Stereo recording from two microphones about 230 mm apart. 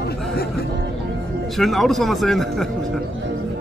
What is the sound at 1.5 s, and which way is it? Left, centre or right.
Speech, centre.